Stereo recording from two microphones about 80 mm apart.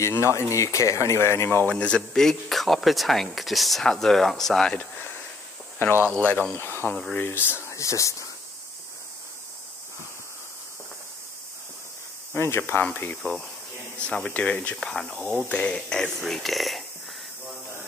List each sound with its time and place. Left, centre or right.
0.1 s speech: left
1.7 s speech: centre
4.7 s speech: left
6.1 s speech: centre
6.9 s speech: centre
7.2 s speech: left
7.7 s speech: left
12.4 s speech: left
13.2 s speech: centre
14.0 s speech: centre
14.8 s speech: centre